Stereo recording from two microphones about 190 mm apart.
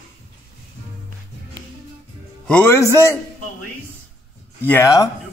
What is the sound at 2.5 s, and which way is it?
Speech, 10° left (ahead or behind).